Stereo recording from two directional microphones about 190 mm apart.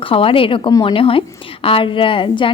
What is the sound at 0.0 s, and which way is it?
Speech, 30° left (ahead or behind).